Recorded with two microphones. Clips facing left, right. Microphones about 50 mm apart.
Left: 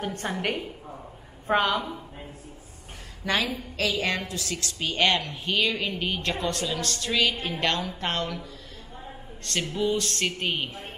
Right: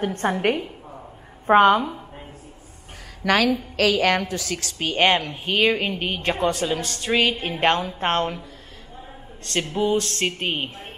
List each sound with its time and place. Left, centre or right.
0.0 s a woman's voice: right
0.3 s a woman's voice: right
3.3 s a woman's voice: right
3.7 s a woman's voice: right
9.5 s a woman's voice: right